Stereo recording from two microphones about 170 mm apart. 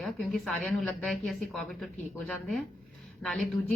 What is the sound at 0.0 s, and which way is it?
A woman's voice, centre (ahead or behind).